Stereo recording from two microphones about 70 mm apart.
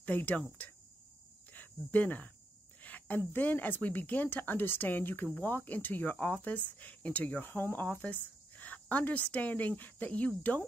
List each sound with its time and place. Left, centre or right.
0.0 s speech: left
1.5 s speech: left